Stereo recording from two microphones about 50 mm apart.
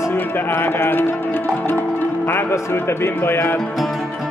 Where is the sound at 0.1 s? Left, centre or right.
Left.